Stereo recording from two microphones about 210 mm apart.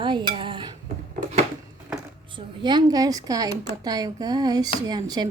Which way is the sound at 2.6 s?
20° right (ahead or behind).